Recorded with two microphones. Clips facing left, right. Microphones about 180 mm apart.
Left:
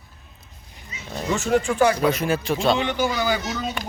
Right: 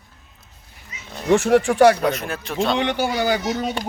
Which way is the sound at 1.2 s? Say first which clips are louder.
Right 6 dB; 60° right (ahead or behind).